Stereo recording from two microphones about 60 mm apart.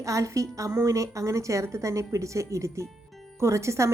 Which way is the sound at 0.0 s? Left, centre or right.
Right.